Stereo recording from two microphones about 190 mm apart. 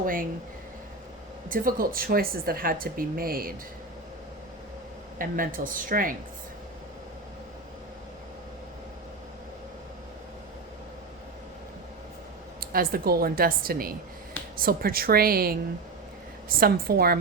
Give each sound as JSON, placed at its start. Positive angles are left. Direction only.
{"t": 0.0, "sound": "speech", "side_deg": -45}
{"t": 1.5, "sound": "speech", "side_deg": -45}
{"t": 5.1, "sound": "speech", "side_deg": -45}
{"t": 12.5, "sound": "speech", "side_deg": -50}